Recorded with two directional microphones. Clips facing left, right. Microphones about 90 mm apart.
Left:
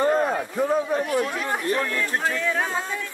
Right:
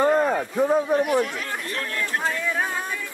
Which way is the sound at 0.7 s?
20° right (ahead or behind).